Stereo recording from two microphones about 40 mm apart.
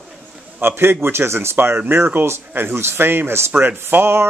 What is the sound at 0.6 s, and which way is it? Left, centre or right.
Speech, right.